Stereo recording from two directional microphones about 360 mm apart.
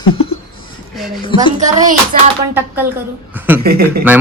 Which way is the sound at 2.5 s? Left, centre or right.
Centre.